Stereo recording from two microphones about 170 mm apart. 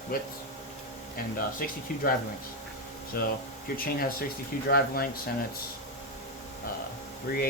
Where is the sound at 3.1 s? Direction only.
65° left (ahead or behind).